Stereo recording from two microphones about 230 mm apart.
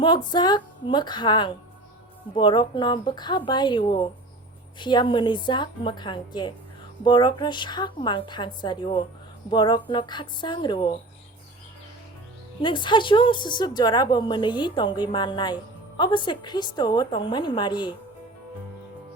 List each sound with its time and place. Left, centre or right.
0.0 s a woman's voice: centre
12.6 s a woman's voice: left